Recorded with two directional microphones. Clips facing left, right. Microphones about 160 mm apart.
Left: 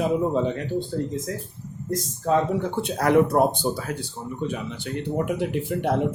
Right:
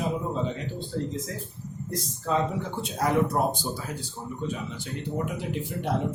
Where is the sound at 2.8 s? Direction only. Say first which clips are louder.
Left 5 dB; 65° left (ahead or behind).